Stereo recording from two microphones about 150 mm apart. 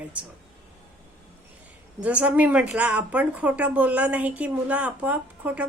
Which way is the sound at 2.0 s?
10° right (ahead or behind).